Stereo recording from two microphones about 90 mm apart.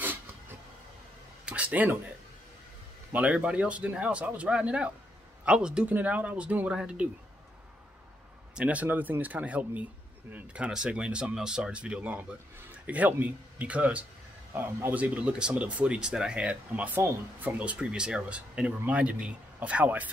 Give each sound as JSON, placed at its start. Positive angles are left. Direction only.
{"t": 1.4, "sound": "a sound", "side_deg": -15}
{"t": 3.1, "sound": "speech", "side_deg": -15}
{"t": 8.5, "sound": "speech", "side_deg": -15}